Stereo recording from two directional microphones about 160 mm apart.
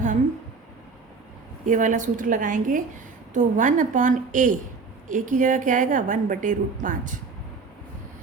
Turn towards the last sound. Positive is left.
turn(degrees=-55)  # may be behind; listen again after turning